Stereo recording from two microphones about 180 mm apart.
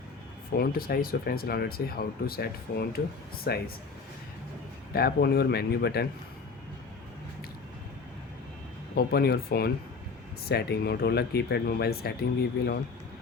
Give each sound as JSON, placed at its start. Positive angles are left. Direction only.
{"t": 0.5, "sound": "speech", "side_deg": 55}
{"t": 4.9, "sound": "speech", "side_deg": 60}
{"t": 9.0, "sound": "speech", "side_deg": 60}